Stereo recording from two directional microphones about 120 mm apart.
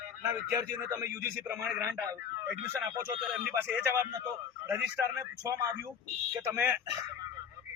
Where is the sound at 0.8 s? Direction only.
25° right (ahead or behind).